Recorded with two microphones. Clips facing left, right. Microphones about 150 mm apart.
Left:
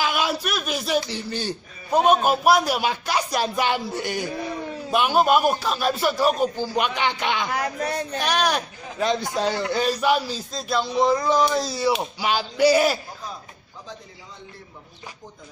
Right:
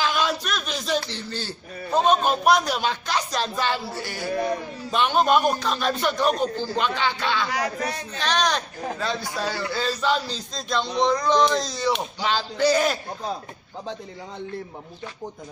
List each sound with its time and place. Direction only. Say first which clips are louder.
0.0 s a sound: even; 10° left (ahead or behind)
1.1 s speech: left 4 dB; 15° left (ahead or behind)
4.9 s speech: left 1 dB; 5° left (ahead or behind)